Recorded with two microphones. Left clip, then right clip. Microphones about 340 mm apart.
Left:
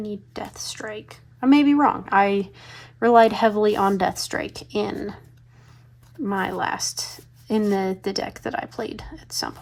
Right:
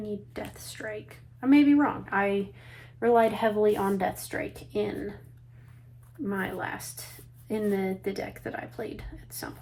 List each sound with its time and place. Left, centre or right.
0.3 s speech: centre
6.2 s speech: centre